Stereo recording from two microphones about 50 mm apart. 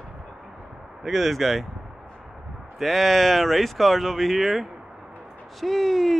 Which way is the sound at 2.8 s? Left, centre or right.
Centre.